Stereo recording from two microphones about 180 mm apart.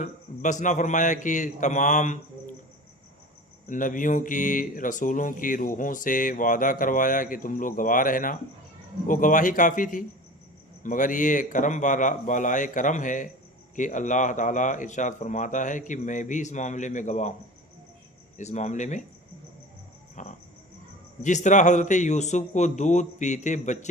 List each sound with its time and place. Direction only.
0.0 s speech: 45° left (ahead or behind)
3.7 s speech: 45° left (ahead or behind)
18.3 s a man's voice: 40° left (ahead or behind)
20.2 s a man's voice: 40° left (ahead or behind)